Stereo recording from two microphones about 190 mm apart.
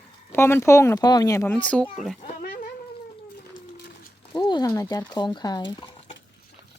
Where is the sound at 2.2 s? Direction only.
45° left (ahead or behind).